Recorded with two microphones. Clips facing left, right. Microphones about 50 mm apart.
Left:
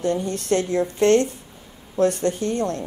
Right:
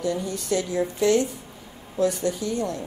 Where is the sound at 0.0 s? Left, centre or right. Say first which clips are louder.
Left 3 dB; left.